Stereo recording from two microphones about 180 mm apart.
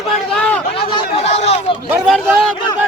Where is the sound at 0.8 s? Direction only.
30° left (ahead or behind).